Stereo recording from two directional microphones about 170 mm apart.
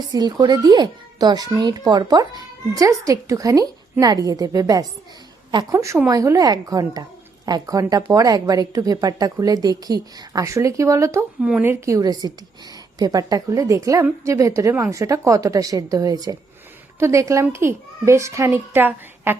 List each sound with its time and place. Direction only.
0.1 s a child's voice: 25° right (ahead or behind)